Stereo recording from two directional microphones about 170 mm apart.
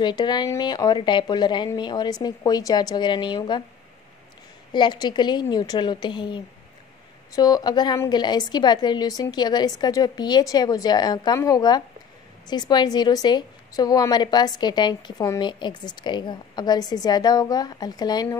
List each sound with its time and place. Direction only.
0.0 s a woman's voice: 25° left (ahead or behind)
4.7 s a woman's voice: 25° left (ahead or behind)